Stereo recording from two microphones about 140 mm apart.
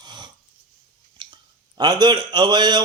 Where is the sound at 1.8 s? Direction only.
30° right (ahead or behind).